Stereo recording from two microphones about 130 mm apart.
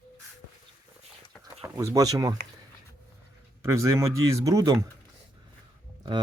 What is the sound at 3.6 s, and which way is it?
Speech, 25° right (ahead or behind).